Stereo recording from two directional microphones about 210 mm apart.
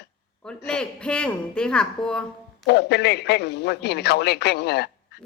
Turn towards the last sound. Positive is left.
turn(degrees=50)  # may be behind; listen again after turning